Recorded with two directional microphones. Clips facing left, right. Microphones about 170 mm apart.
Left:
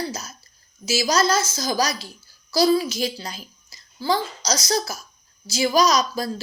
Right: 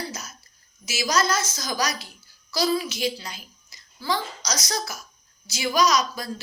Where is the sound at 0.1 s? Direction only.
30° left (ahead or behind).